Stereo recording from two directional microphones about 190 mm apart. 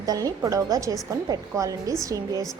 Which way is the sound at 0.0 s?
20° right (ahead or behind).